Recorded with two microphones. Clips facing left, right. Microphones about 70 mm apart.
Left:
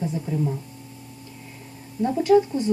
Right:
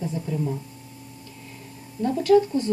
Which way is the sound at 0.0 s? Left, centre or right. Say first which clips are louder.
Left 1 dB; centre.